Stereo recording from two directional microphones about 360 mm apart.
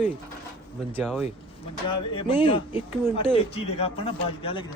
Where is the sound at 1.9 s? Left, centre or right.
Centre.